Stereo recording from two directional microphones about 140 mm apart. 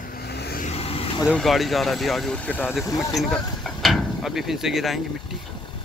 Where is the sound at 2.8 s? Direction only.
20° left (ahead or behind).